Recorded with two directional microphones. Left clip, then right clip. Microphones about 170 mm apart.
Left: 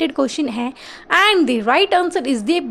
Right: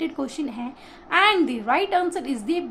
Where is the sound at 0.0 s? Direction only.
45° left (ahead or behind).